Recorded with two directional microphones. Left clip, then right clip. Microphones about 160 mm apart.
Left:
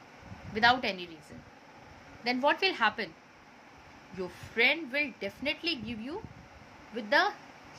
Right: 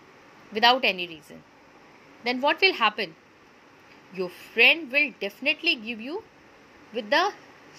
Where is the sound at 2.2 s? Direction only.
20° right (ahead or behind).